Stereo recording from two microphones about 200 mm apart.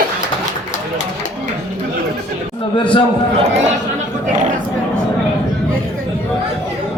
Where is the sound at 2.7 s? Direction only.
25° left (ahead or behind).